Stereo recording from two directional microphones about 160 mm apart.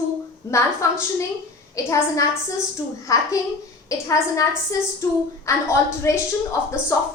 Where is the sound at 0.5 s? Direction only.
20° left (ahead or behind).